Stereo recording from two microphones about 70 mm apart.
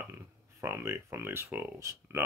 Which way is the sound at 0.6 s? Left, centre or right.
Right.